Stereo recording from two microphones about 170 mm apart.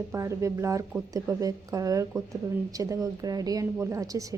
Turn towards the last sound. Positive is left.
turn(degrees=-20)  # may be behind; listen again after turning